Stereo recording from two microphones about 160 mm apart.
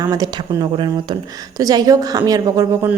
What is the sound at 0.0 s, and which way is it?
A woman's voice, 25° right (ahead or behind).